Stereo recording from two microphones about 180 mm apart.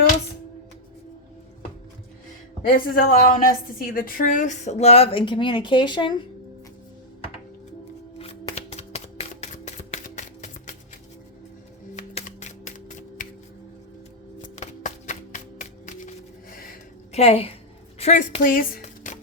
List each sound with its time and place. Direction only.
2.6 s a woman's voice: 55° left (ahead or behind); by 6.1 s 25° left (ahead or behind)
8.2 s shuffling cards: 35° left (ahead or behind)
11.9 s music: 40° left (ahead or behind)
14.4 s music: 40° left (ahead or behind)
17.1 s a woman's voice: 35° left (ahead or behind)
18.4 s a sound: 50° left (ahead or behind)